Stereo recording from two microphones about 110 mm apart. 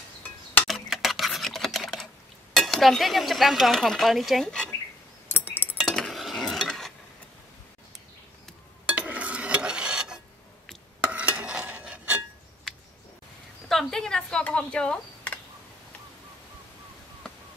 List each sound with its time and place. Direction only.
0.7 s typing: centre (ahead or behind)
2.5 s speech: centre (ahead or behind)
5.3 s chink: 20° left (ahead or behind)
5.9 s cutlery: 5° left (ahead or behind)
8.9 s cutlery: 10° right (ahead or behind)
11.1 s stir: 10° right (ahead or behind)
13.7 s a sound: 5° left (ahead or behind)